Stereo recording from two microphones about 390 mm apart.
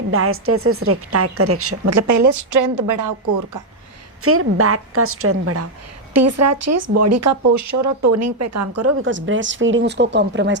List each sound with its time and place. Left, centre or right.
0.1 s speech: right
4.2 s speech: right